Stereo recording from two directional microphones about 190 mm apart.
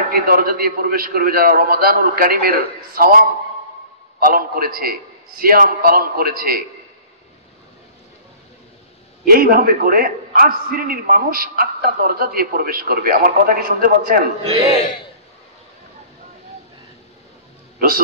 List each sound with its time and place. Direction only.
0.1 s a man's voice: 50° right (ahead or behind)
9.2 s a man's voice: 50° right (ahead or behind)
17.7 s speech: 50° right (ahead or behind)